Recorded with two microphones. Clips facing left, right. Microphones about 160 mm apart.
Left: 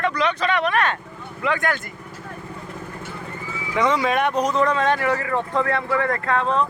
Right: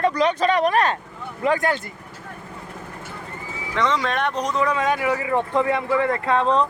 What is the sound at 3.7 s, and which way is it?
Speech, 10° left (ahead or behind).